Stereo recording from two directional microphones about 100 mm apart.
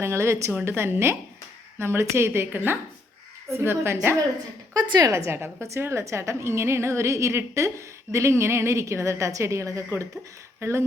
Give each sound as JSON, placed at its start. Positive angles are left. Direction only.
{"t": 0.0, "sound": "a woman's voice", "side_deg": -25}
{"t": 4.7, "sound": "a woman's voice", "side_deg": -40}